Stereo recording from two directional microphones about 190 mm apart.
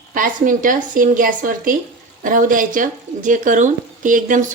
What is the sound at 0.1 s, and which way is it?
Speech, 45° right (ahead or behind).